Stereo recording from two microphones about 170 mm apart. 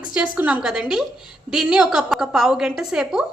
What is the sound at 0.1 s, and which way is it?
A woman's voice, 5° right (ahead or behind).